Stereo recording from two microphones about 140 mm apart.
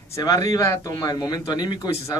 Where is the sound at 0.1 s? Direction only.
25° left (ahead or behind).